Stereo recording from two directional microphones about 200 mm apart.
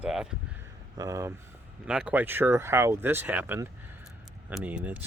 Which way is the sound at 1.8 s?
5° right (ahead or behind).